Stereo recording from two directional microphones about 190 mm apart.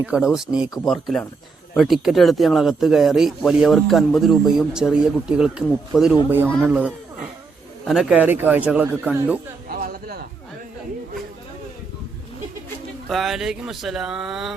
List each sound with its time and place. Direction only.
0.0 s a man's voice: 5° right (ahead or behind)
9.6 s a sound: 50° right (ahead or behind)
13.1 s speech: centre (ahead or behind)